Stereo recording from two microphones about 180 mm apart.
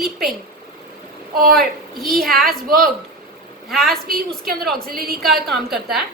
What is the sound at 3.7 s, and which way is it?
A woman's voice, centre (ahead or behind).